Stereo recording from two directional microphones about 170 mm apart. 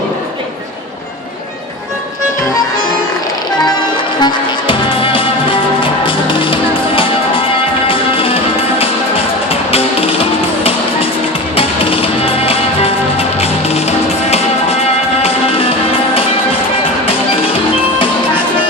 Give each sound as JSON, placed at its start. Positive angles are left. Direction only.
{"t": 4.2, "sound": "music", "side_deg": 25}
{"t": 9.5, "sound": "music", "side_deg": 35}